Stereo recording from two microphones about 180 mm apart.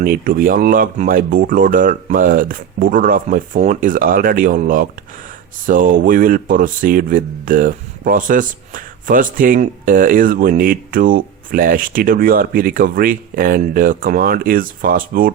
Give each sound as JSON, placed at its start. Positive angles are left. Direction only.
{"t": 0.0, "sound": "speech", "side_deg": -50}